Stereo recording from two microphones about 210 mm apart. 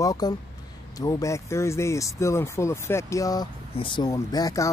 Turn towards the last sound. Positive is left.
turn(degrees=15)  # may be behind; listen again after turning